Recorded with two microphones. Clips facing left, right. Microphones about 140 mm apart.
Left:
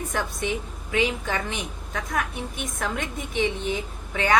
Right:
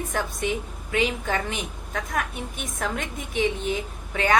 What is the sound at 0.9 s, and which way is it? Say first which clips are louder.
Speech: even; 45° right (ahead or behind).